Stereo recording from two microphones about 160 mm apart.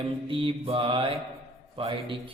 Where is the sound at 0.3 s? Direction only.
35° right (ahead or behind).